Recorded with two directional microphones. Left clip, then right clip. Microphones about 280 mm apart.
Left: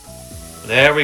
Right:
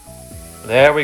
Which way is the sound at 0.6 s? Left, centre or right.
Centre.